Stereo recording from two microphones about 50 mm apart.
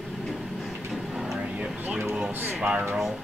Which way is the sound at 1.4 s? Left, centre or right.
Right.